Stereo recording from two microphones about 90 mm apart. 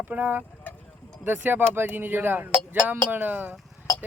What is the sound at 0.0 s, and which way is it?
Speech, 20° right (ahead or behind).